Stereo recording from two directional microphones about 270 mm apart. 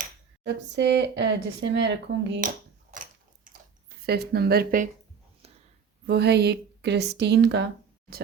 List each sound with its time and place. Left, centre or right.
0.0 s speech: right
2.9 s a sound: right
6.1 s speech: right